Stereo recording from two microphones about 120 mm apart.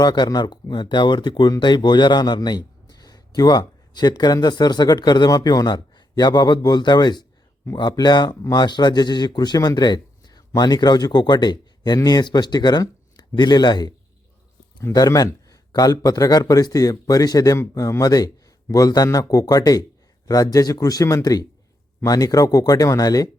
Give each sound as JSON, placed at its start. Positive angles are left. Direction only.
{"t": 0.0, "sound": "speech", "side_deg": 35}
{"t": 14.9, "sound": "speech", "side_deg": 30}